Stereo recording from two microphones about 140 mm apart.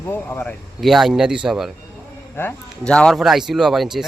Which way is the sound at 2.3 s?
15° left (ahead or behind).